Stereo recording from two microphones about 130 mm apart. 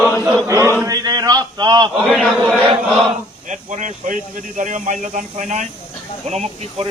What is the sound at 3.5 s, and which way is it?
Speech, 75° right (ahead or behind).